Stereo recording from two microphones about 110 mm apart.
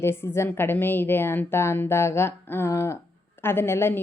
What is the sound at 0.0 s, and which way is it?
A woman's voice, 25° left (ahead or behind).